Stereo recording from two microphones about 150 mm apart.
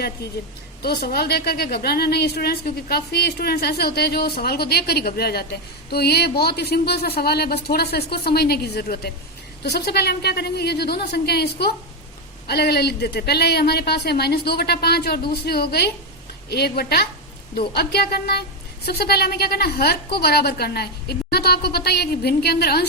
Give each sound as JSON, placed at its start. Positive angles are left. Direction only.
{"t": 0.8, "sound": "a woman's voice", "side_deg": 90}